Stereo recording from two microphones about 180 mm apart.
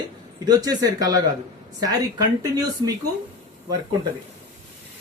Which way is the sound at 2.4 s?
20° right (ahead or behind).